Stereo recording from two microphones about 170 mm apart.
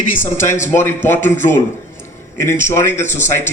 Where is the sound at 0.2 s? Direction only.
15° left (ahead or behind).